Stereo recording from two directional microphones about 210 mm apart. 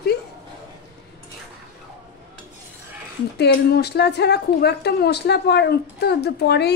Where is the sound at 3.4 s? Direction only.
50° left (ahead or behind).